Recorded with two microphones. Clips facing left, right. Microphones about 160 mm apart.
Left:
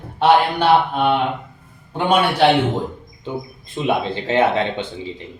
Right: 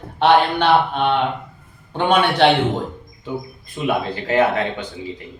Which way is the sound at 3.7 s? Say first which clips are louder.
Left 1 dB; 25° left (ahead or behind).